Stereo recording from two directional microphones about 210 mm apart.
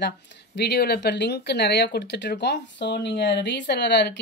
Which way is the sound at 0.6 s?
50° left (ahead or behind).